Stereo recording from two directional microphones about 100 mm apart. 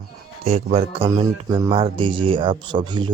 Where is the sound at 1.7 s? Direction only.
60° right (ahead or behind).